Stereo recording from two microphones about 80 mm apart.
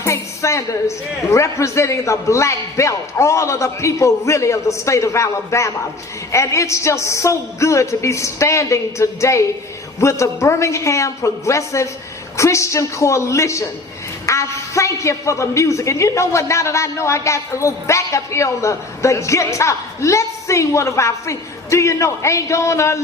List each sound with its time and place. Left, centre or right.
0.0 s a man's voice: left
14.3 s a sound: left
14.9 s a man's voice: left